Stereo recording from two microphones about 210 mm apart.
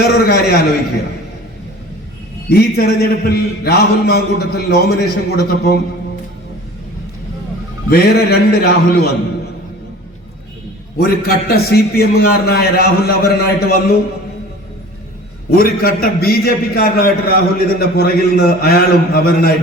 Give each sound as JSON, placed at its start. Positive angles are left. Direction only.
{"t": 0.0, "sound": "a man's voice", "side_deg": 50}
{"t": 2.5, "sound": "a man's voice", "side_deg": 45}
{"t": 7.9, "sound": "a man's voice", "side_deg": 50}
{"t": 10.9, "sound": "a man's voice", "side_deg": 45}
{"t": 15.4, "sound": "a man's voice", "side_deg": 45}